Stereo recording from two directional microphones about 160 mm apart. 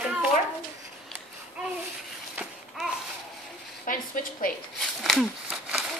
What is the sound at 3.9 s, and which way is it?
Speech, 60° left (ahead or behind).